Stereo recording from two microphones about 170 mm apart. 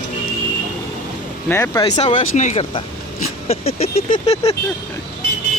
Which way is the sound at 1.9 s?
45° left (ahead or behind).